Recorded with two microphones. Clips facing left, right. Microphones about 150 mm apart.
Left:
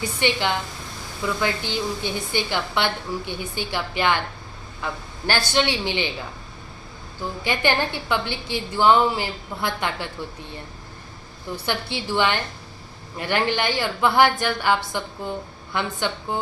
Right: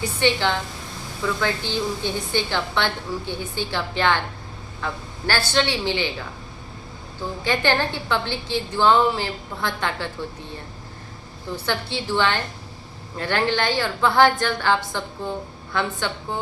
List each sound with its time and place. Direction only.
0.0 s a woman's voice: 15° left (ahead or behind)
7.4 s a woman's voice: 15° left (ahead or behind)
11.5 s a woman's voice: 15° left (ahead or behind)